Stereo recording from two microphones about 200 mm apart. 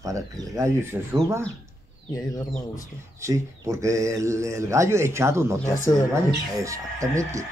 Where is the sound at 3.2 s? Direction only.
15° right (ahead or behind).